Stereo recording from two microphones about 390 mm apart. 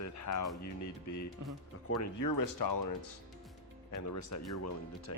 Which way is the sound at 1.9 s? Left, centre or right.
Left.